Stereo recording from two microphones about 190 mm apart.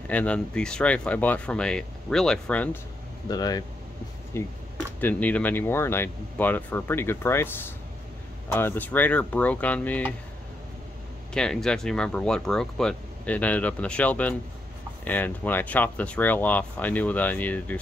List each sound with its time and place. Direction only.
0.1 s speech: 5° left (ahead or behind)
3.3 s speech: 20° left (ahead or behind)
11.3 s speech: 5° left (ahead or behind)